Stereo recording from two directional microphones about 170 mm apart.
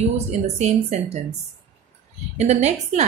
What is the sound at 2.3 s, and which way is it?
Speech, 40° right (ahead or behind).